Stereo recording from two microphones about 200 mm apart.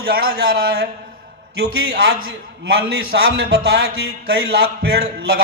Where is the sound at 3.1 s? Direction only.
50° right (ahead or behind).